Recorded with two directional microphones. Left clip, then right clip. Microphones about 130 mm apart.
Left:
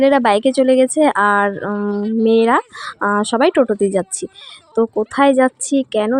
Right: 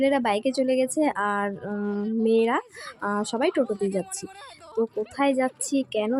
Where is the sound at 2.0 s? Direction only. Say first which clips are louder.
Left 8 dB; 25° right (ahead or behind).